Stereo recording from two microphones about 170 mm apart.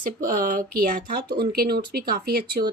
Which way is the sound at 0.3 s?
55° right (ahead or behind).